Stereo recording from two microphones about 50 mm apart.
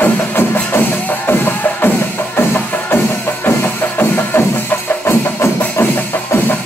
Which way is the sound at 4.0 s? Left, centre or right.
Left.